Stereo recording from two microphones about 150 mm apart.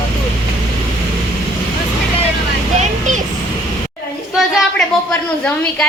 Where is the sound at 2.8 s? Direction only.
55° right (ahead or behind).